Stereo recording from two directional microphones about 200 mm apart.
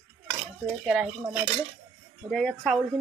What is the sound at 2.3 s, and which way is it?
Speech, 5° left (ahead or behind).